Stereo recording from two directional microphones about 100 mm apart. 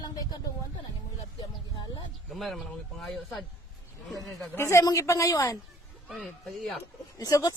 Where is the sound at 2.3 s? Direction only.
Centre (ahead or behind).